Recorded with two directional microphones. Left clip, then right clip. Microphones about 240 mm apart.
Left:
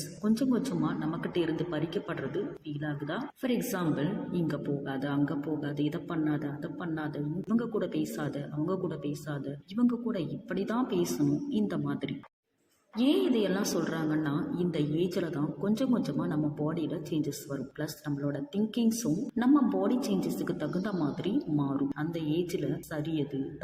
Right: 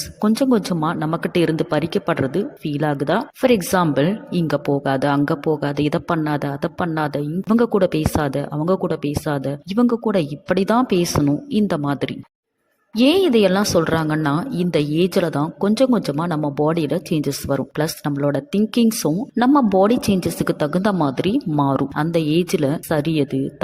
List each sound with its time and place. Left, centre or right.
0.2 s a woman's voice: right